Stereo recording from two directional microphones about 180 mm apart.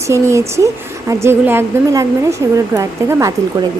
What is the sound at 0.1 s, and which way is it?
A woman's voice, 15° right (ahead or behind).